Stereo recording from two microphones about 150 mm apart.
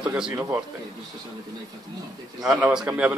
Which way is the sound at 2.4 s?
10° right (ahead or behind).